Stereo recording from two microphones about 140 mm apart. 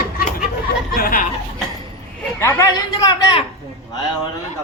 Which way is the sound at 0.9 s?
85° left.